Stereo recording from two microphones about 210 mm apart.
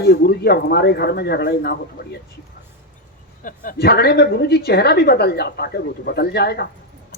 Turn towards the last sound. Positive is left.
turn(degrees=50)  # may be behind; listen again after turning